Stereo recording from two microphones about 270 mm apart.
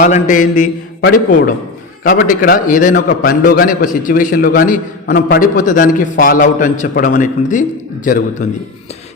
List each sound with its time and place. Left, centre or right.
0.0 s a man's voice: left